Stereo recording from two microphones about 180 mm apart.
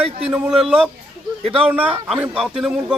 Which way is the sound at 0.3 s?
5° right (ahead or behind).